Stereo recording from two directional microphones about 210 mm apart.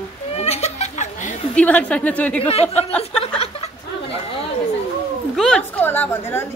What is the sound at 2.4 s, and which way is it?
Speech, 30° left (ahead or behind).